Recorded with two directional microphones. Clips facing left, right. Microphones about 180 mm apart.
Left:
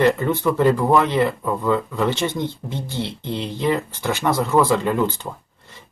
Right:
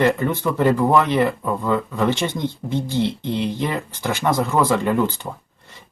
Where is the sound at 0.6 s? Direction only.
20° left (ahead or behind).